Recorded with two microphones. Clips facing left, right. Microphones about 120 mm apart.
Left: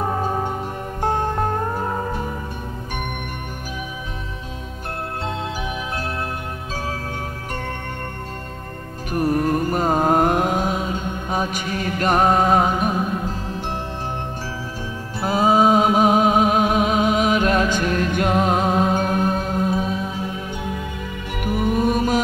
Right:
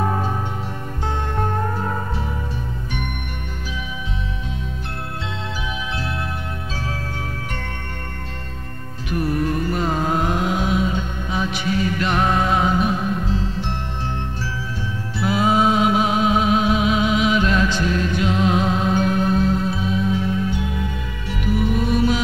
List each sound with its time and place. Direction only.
1.0 s music: 45° left (ahead or behind)
9.1 s music: 40° left (ahead or behind)
15.1 s music: 40° left (ahead or behind)
21.3 s music: 50° left (ahead or behind)